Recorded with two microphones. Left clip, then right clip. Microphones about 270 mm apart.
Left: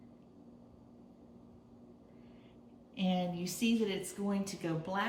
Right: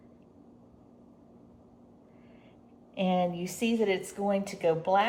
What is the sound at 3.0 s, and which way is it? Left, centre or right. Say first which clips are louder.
Speech: right 8 dB; right.